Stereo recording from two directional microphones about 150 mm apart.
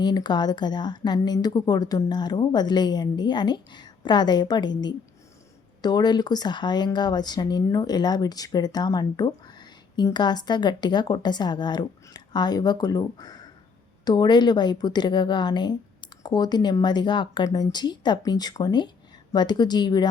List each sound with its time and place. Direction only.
0.0 s a woman's voice: 30° left (ahead or behind)